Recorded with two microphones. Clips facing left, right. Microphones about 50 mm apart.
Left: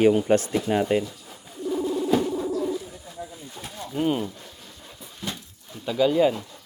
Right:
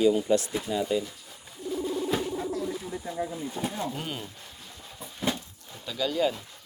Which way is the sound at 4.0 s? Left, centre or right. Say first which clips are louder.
Left 12 dB; centre.